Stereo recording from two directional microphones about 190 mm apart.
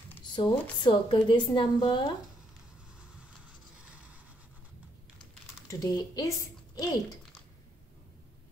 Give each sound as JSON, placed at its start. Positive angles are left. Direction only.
{"t": 0.3, "sound": "a woman's voice", "side_deg": 25}
{"t": 5.7, "sound": "speech", "side_deg": 20}